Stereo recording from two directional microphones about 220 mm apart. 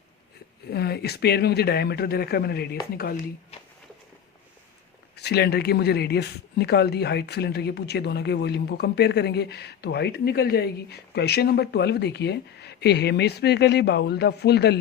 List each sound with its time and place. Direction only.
0.7 s speech: 45° left (ahead or behind)
5.1 s speech: 45° left (ahead or behind)